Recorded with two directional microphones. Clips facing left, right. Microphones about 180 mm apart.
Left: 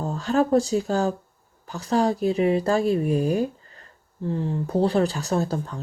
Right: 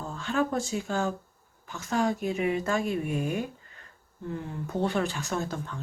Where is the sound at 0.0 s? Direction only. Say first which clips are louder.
Left 6 dB; 40° left (ahead or behind).